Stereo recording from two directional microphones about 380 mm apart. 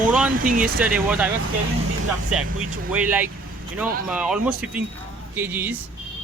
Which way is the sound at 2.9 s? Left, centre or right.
Centre.